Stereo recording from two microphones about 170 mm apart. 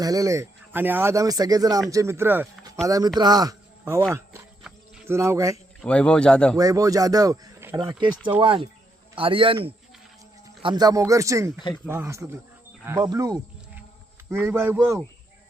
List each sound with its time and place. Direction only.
0.0 s a man's voice: 20° right (ahead or behind)
5.0 s speech: 15° right (ahead or behind)
5.8 s speech: 5° left (ahead or behind)
6.6 s speech: 20° right (ahead or behind)
8.4 s a man's voice: 30° right (ahead or behind)
10.6 s speech: 25° right (ahead or behind)